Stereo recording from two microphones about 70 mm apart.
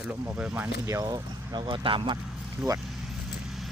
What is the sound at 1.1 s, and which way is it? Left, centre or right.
Speech, right.